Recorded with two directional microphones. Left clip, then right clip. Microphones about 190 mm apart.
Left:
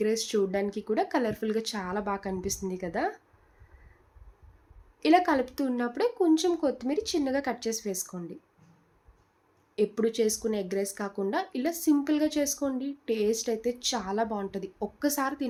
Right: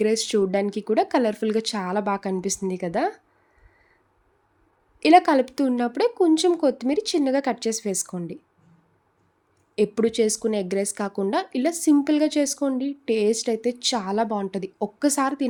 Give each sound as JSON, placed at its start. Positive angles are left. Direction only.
{"t": 0.0, "sound": "speech", "side_deg": -50}
{"t": 4.9, "sound": "speech", "side_deg": -45}
{"t": 9.7, "sound": "speech", "side_deg": -45}